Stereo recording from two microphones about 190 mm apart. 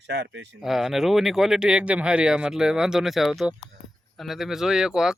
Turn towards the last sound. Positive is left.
turn(degrees=-5)  # may be behind; listen again after turning